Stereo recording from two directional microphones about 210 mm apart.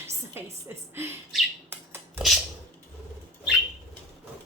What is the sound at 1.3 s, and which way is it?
Bird, 10° right (ahead or behind).